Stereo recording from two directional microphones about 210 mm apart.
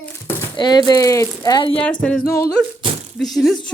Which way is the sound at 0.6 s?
20° left (ahead or behind).